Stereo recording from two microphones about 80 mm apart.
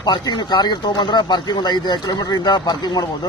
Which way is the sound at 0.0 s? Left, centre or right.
Left.